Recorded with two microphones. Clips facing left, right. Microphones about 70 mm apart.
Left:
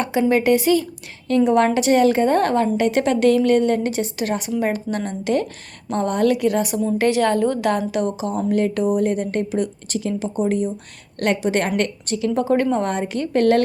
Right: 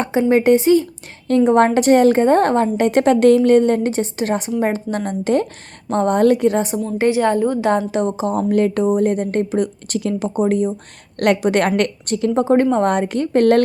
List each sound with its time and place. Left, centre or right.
0.0 s a woman's voice: right
7.9 s a woman's voice: right
12.3 s a woman's voice: right
12.7 s a woman's voice: right